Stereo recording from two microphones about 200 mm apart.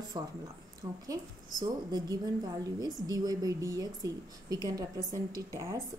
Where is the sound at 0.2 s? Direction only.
20° right (ahead or behind).